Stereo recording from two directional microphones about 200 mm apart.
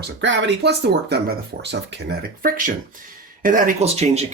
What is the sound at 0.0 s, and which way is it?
Speech, 65° right (ahead or behind).